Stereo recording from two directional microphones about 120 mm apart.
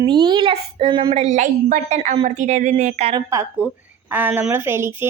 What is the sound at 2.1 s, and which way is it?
Speech, 65° right (ahead or behind).